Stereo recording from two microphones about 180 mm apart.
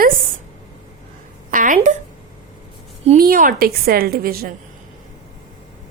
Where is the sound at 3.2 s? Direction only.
50° right (ahead or behind).